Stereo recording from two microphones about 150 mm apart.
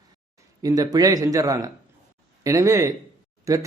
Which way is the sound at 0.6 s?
25° right (ahead or behind).